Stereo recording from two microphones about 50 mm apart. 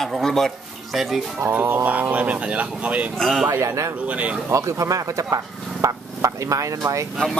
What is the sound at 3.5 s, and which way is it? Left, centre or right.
Speech, right.